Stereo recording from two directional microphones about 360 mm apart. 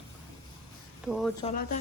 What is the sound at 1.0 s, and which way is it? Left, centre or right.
Speech, centre.